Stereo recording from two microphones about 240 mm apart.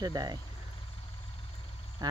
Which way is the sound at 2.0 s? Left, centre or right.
Centre.